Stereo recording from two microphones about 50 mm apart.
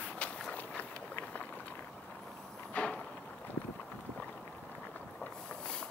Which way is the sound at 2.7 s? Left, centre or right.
Left.